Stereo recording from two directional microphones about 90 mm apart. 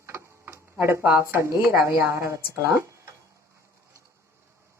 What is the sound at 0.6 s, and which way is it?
A woman's voice, 25° right (ahead or behind).